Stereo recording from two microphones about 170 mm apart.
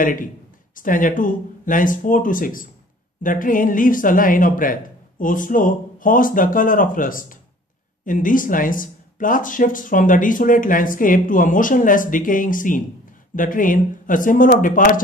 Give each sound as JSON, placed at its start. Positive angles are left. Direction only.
{"t": 0.0, "sound": "speech", "side_deg": 55}